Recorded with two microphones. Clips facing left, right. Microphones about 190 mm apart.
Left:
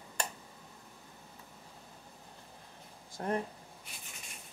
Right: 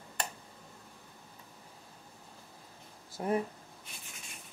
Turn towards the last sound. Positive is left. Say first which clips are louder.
# right 3 dB
turn(degrees=-5)  # may be behind; listen again after turning